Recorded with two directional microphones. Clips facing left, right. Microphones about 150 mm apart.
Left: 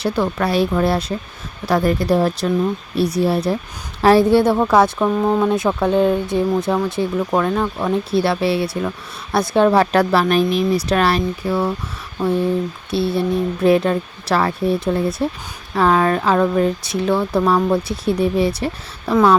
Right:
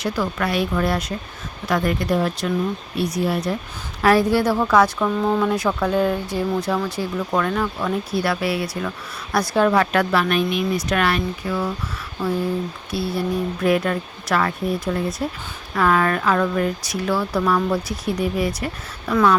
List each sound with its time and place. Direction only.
0.0 s speech: 30° left (ahead or behind)
12.9 s speech: 25° left (ahead or behind)